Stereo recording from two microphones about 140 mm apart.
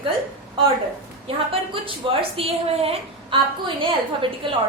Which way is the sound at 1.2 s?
40° right (ahead or behind).